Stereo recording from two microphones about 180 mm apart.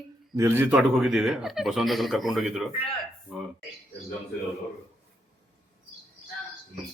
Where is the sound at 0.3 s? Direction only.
15° right (ahead or behind).